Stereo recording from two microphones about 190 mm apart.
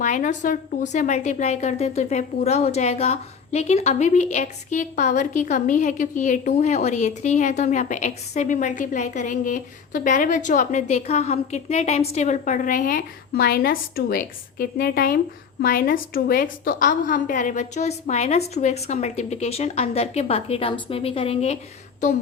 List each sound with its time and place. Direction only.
0.0 s a woman's voice: 40° left (ahead or behind)